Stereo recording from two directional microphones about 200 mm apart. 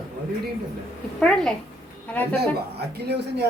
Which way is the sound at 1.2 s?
5° left (ahead or behind).